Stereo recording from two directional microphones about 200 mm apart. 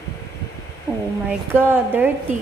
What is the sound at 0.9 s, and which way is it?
A woman's voice, 15° right (ahead or behind).